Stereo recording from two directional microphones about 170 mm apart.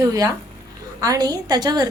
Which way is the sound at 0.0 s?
20° right (ahead or behind).